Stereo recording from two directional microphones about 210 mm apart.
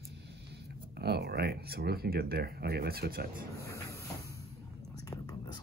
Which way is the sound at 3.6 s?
15° left (ahead or behind).